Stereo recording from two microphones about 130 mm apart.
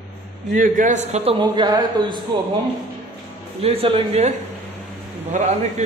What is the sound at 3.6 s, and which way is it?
Speech, 50° right (ahead or behind).